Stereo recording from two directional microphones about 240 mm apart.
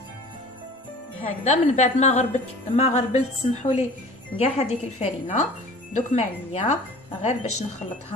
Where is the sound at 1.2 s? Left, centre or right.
Left.